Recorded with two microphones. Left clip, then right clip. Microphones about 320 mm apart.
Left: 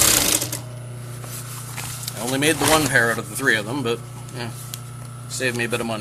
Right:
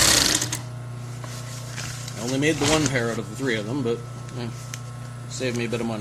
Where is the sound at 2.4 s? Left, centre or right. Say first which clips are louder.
Left 3 dB; left.